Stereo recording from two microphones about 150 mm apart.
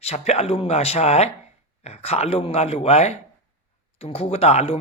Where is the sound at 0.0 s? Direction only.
45° left (ahead or behind).